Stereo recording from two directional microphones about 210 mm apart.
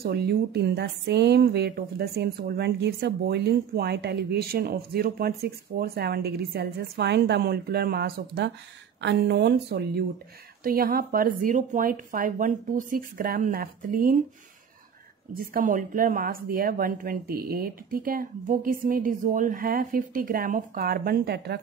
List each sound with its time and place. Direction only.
0.0 s a woman's voice: 50° right (ahead or behind)
15.3 s a woman's voice: 40° right (ahead or behind)